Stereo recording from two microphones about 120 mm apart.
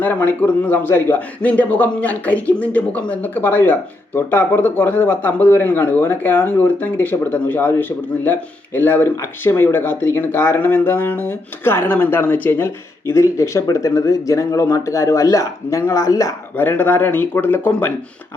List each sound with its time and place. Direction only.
0.0 s speech: 15° left (ahead or behind)
16.6 s speech: 15° left (ahead or behind)